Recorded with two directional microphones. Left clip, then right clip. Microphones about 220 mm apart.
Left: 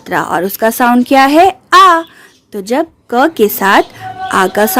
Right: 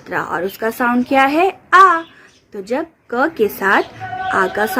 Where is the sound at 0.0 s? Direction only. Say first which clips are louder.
Left 7 dB; 45° left (ahead or behind).